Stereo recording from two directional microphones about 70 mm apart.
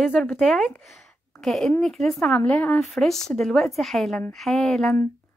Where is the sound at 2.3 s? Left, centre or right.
Left.